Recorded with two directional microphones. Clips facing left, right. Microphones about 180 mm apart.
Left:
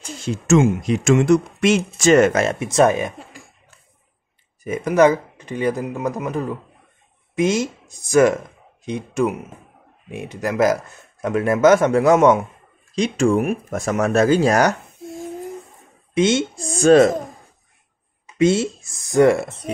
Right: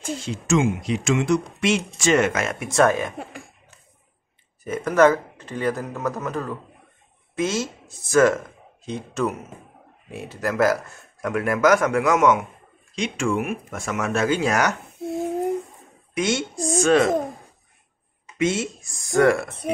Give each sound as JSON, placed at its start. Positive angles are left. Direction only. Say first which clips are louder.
{"t": 0.3, "sound": "speech", "louder": "left 6 dB", "side_deg": 45}
{"t": 2.7, "sound": "speech", "louder": "left 2 dB", "side_deg": 20}
{"t": 4.6, "sound": "speech", "louder": "left 2 dB", "side_deg": 15}
{"t": 16.2, "sound": "speech", "louder": "left 6 dB", "side_deg": 25}
{"t": 16.8, "sound": "speech", "louder": "left 7 dB", "side_deg": 40}
{"t": 18.4, "sound": "speech", "louder": "left 6 dB", "side_deg": 30}